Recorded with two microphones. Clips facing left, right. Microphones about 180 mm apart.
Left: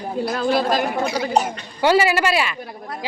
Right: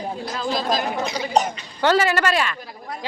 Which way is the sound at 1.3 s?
5° left (ahead or behind).